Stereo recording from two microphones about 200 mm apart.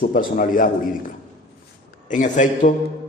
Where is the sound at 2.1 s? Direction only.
40° left (ahead or behind).